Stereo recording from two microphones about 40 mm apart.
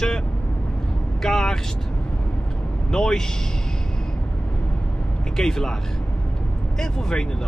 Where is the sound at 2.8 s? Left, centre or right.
Centre.